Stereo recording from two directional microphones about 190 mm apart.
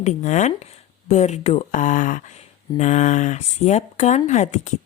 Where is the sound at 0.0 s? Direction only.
40° left (ahead or behind).